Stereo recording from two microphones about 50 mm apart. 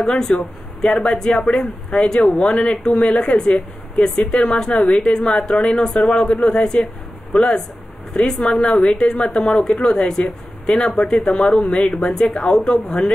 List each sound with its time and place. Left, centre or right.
0.0 s speech: centre
8.4 s speech: centre